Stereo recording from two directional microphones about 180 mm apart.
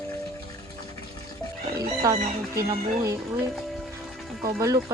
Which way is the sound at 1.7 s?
20° right (ahead or behind).